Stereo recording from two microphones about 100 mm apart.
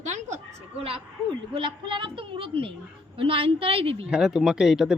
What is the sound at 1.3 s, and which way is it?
A woman's voice, 55° right (ahead or behind).